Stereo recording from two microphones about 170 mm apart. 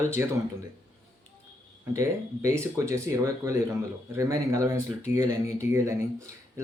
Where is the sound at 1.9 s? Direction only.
20° right (ahead or behind).